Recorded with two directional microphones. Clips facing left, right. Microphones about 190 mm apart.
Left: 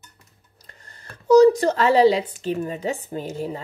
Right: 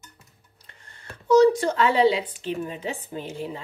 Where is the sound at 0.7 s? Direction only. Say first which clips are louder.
Right 1 dB; 40° left (ahead or behind).